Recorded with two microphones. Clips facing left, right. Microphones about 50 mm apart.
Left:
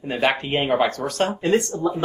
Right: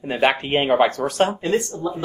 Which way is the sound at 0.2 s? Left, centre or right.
Right.